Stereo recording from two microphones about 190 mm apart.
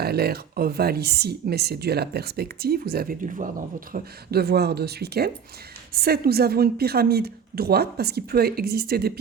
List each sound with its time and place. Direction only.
0.0 s speech: 55° right (ahead or behind)
3.9 s speech: 55° right (ahead or behind)